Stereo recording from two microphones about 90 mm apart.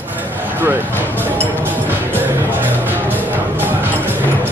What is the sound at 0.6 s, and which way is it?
Speech, 25° right (ahead or behind).